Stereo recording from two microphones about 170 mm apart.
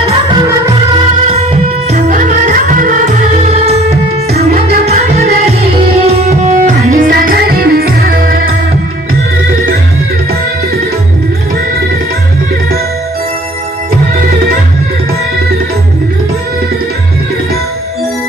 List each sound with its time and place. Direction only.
1.3 s music: 35° right (ahead or behind)
3.4 s music: 40° right (ahead or behind)
7.1 s music: 60° right (ahead or behind)